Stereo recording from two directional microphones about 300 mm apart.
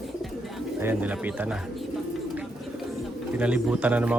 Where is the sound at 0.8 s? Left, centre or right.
Centre.